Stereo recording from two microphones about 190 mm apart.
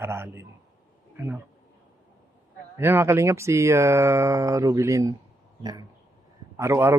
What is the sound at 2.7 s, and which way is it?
Speech, 10° right (ahead or behind).